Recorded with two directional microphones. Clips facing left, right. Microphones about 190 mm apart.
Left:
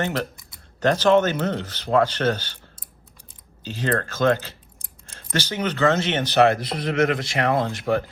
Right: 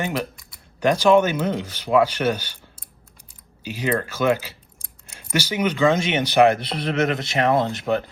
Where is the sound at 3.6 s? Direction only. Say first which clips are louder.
Right 1 dB; 10° right (ahead or behind).